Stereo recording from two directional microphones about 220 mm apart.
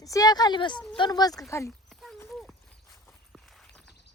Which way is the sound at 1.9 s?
Centre (ahead or behind).